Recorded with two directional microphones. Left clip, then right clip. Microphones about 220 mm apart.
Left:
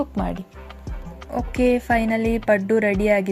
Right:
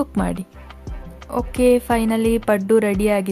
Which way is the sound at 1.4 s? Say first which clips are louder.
Right 4 dB; 15° right (ahead or behind).